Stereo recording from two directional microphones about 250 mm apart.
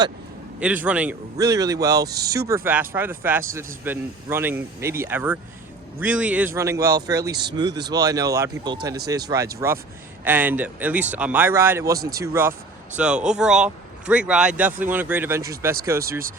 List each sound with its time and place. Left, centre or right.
0.6 s speech: centre
7.7 s speech: right
7.9 s speech: centre